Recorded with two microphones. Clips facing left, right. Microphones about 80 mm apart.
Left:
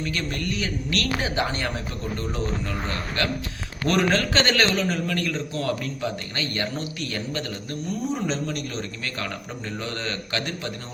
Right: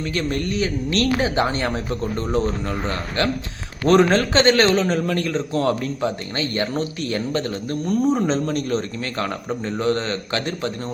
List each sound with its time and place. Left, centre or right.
0.0 s a man's voice: right
3.8 s a man's voice: right